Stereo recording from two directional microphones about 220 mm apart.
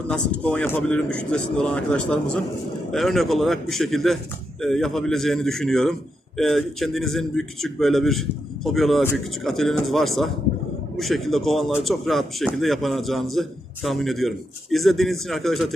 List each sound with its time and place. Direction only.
0.1 s a man's voice: 5° left (ahead or behind)